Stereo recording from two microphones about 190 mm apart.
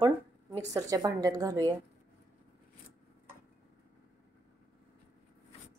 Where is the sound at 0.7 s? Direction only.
20° right (ahead or behind).